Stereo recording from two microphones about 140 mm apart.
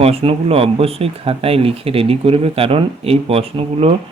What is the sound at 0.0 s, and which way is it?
Speech, 45° right (ahead or behind).